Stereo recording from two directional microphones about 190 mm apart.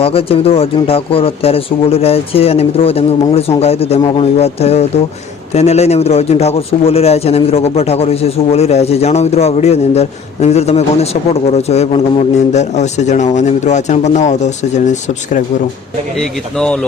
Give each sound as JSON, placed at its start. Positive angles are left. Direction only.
{"t": 0.0, "sound": "a man's voice", "side_deg": 30}
{"t": 16.1, "sound": "speech", "side_deg": 5}